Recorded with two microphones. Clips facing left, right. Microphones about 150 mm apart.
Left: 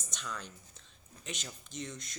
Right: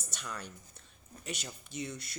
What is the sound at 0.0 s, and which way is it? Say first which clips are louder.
A woman's voice: even; 10° right (ahead or behind).